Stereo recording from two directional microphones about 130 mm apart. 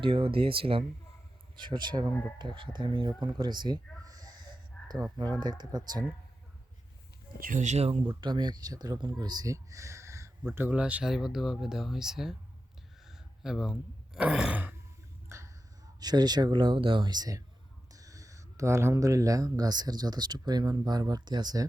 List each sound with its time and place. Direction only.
0.0 s speech: 40° right (ahead or behind)
4.0 s snort: 30° right (ahead or behind)
5.1 s speech: 35° right (ahead or behind)
7.3 s speech: 85° right; by 8.0 s 55° right (ahead or behind)
8.0 s speech: 35° right (ahead or behind); by 14.8 s 10° right (ahead or behind)
15.3 s a sound: 20° right (ahead or behind)
16.0 s speech: 30° right (ahead or behind)